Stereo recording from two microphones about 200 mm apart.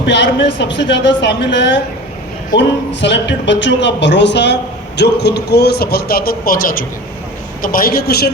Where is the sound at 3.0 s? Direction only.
60° left (ahead or behind).